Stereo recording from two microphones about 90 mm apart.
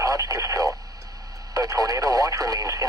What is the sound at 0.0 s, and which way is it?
Radio, 40° right (ahead or behind).